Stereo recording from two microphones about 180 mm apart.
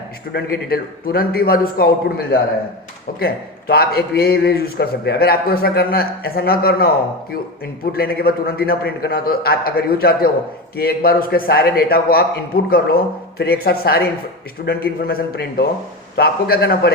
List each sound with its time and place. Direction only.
0.3 s a man's voice: 60° left (ahead or behind)
7.9 s a man's voice: 60° left (ahead or behind)